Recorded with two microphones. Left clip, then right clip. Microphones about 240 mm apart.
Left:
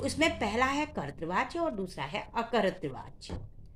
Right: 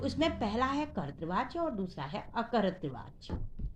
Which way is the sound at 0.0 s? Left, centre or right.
Left.